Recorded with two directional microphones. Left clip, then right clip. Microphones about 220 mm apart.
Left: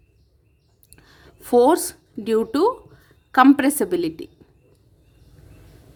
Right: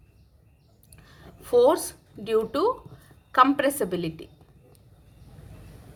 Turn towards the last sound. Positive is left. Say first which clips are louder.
# left 6 dB
turn(degrees=50)  # may be behind; listen again after turning